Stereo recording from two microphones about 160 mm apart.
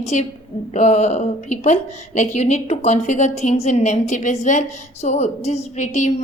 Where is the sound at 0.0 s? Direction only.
45° left (ahead or behind).